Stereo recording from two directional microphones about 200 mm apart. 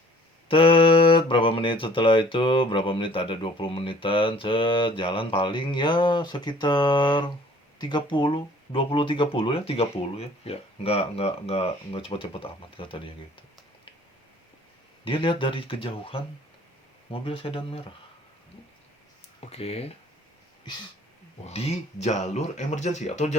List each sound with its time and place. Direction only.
0.4 s speech: 25° left (ahead or behind)
15.0 s speech: 25° left (ahead or behind)
19.4 s speech: 30° left (ahead or behind)
21.4 s speech: 30° left (ahead or behind)